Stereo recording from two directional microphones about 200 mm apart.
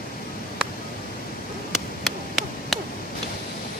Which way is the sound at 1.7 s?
Centre (ahead or behind).